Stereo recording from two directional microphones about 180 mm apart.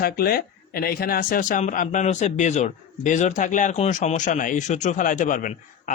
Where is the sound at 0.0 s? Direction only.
55° left (ahead or behind).